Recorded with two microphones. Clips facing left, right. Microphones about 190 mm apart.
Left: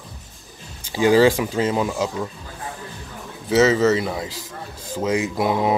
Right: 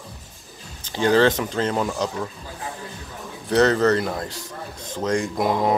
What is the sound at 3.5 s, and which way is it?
Speech, 5° left (ahead or behind).